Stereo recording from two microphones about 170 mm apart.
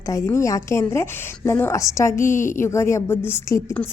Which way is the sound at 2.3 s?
50° left (ahead or behind).